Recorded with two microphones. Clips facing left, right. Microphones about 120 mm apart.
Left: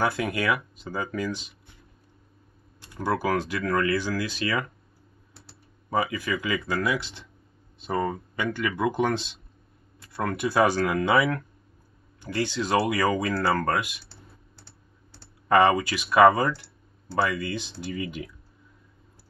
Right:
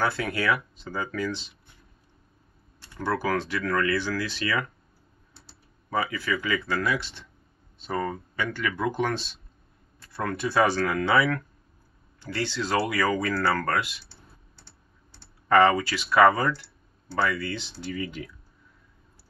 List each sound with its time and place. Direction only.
0.0 s speech: 15° left (ahead or behind)
3.0 s speech: 15° left (ahead or behind)
5.9 s speech: 15° left (ahead or behind)
15.4 s speech: 15° left (ahead or behind)